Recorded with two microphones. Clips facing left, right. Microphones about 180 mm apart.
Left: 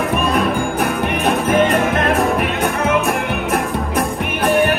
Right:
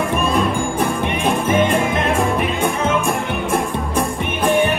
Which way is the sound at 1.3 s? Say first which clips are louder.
Left 2 dB; 10° right (ahead or behind).